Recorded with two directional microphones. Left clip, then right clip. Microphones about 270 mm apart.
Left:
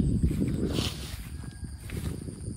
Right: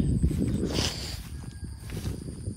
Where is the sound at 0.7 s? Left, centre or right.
Right.